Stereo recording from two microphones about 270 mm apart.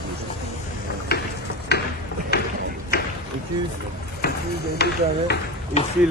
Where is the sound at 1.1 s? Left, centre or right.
Left.